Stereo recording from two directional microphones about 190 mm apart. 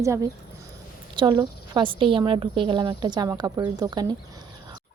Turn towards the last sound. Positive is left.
turn(degrees=-20)  # may be behind; listen again after turning